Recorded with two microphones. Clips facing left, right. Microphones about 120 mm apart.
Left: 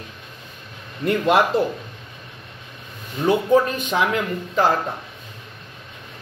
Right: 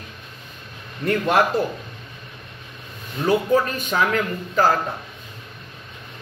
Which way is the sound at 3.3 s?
20° left (ahead or behind).